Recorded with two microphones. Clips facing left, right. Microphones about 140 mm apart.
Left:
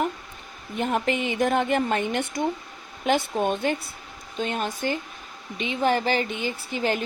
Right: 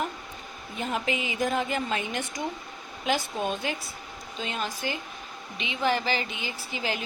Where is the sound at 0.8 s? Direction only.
55° left (ahead or behind).